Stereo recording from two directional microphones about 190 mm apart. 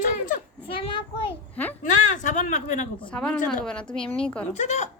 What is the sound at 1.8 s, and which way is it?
Speech, 40° left (ahead or behind).